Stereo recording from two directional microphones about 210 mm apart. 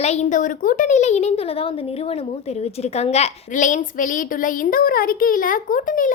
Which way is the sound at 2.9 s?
30° left (ahead or behind).